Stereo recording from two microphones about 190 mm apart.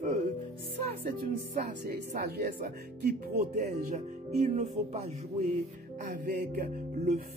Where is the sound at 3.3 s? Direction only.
40° right (ahead or behind).